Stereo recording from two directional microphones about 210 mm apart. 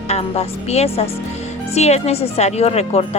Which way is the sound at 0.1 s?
30° left (ahead or behind).